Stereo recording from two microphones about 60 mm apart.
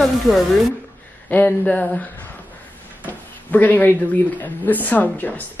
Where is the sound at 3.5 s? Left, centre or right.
Left.